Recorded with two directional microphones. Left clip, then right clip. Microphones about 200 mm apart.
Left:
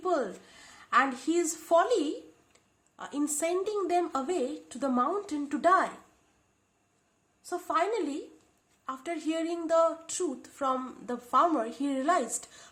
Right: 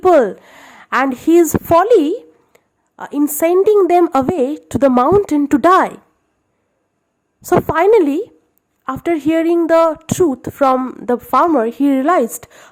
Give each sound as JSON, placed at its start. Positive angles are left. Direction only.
{"t": 0.1, "sound": "a woman's voice", "side_deg": -40}
{"t": 7.7, "sound": "speech", "side_deg": -40}